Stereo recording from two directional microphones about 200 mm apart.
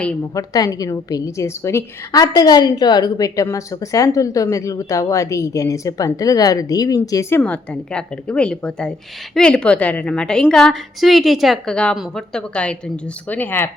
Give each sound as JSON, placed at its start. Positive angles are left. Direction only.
{"t": 0.3, "sound": "a woman's voice", "side_deg": 20}